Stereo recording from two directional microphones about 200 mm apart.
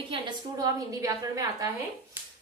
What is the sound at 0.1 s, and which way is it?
A woman's voice, 20° right (ahead or behind).